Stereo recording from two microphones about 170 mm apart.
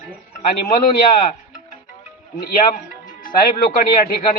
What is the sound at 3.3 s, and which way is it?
Speech, 55° left (ahead or behind).